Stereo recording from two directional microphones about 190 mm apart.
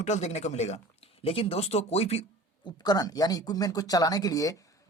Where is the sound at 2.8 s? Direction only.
20° left (ahead or behind).